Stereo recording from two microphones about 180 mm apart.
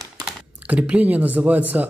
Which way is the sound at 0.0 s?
5° right (ahead or behind).